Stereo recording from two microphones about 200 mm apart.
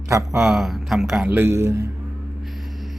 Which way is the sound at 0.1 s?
15° right (ahead or behind).